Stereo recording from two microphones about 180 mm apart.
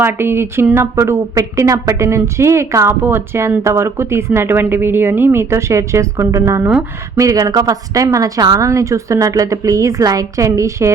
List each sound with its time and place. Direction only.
0.0 s speech: 10° right (ahead or behind)